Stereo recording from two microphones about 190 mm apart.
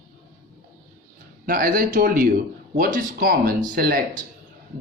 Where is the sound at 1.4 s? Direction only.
50° right (ahead or behind).